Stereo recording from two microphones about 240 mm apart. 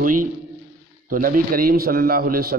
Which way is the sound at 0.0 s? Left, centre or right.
Right.